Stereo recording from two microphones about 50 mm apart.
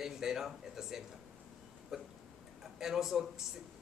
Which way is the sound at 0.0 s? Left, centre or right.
Centre.